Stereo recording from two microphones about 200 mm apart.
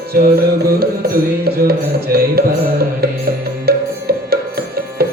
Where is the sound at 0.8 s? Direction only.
50° right (ahead or behind).